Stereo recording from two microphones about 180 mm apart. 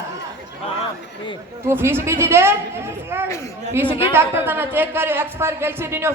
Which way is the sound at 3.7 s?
10° right (ahead or behind).